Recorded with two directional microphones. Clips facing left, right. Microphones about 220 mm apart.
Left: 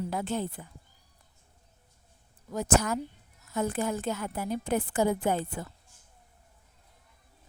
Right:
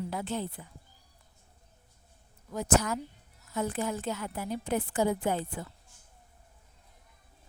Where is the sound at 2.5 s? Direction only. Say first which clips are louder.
Left 1 dB; 45° left (ahead or behind).